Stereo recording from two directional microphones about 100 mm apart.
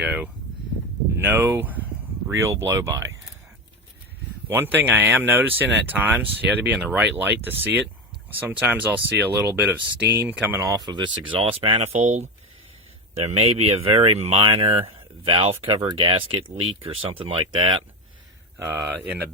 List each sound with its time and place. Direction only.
0.0 s speech: 10° right (ahead or behind)
1.2 s a sound: 20° right (ahead or behind)
2.3 s speech: 30° right (ahead or behind)
4.4 s speech: 20° right (ahead or behind)
10.8 s speech: 50° right (ahead or behind); by 12.0 s 90° right
13.1 s speech: 90° right; by 17.7 s 60° right (ahead or behind)
18.6 s speech: 25° right (ahead or behind)